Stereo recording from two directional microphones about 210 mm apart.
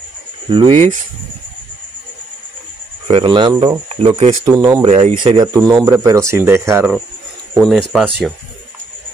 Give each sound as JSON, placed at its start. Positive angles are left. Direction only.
{"t": 0.5, "sound": "speech", "side_deg": -25}
{"t": 3.1, "sound": "speech", "side_deg": -25}
{"t": 7.5, "sound": "speech", "side_deg": 0}